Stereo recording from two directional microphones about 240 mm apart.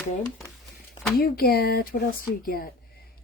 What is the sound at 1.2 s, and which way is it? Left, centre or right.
Speech, left.